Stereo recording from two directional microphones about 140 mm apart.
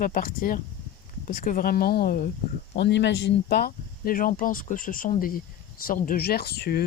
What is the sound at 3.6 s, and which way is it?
Speech, 90° left.